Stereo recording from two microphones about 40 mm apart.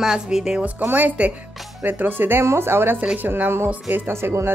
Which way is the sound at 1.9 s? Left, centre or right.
Right.